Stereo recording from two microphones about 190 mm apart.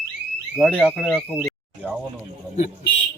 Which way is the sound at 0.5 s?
5° left (ahead or behind).